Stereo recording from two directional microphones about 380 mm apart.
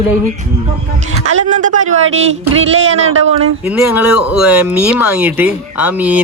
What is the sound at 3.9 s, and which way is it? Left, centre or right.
Speech, left.